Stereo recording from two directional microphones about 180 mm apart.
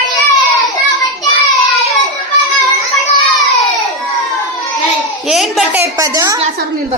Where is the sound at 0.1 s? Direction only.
Centre (ahead or behind).